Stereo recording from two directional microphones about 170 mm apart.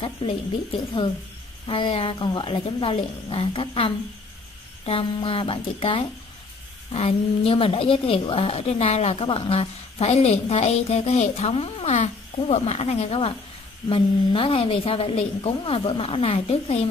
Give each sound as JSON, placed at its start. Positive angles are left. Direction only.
{"t": 0.2, "sound": "a woman's voice", "side_deg": 35}
{"t": 1.7, "sound": "a woman's voice", "side_deg": 35}